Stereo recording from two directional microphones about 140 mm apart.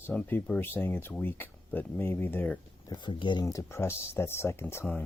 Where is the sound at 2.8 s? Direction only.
35° left (ahead or behind).